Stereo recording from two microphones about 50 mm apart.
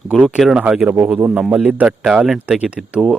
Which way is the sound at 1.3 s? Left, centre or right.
Centre.